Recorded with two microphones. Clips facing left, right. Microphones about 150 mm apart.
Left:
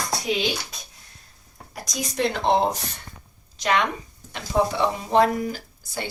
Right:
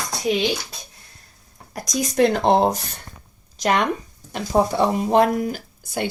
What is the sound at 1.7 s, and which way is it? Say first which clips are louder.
A woman's voice: right 6 dB; 45° right (ahead or behind).